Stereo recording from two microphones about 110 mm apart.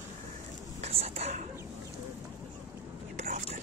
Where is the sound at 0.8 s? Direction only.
75° right (ahead or behind).